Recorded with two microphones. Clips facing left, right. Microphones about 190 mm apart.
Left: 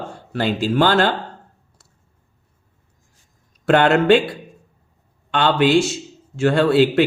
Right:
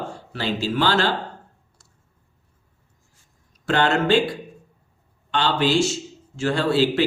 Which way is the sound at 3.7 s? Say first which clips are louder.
Left 6 dB; 60° left (ahead or behind).